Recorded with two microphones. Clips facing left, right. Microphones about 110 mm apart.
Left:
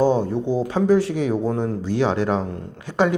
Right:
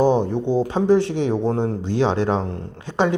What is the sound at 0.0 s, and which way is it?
Speech, 20° right (ahead or behind).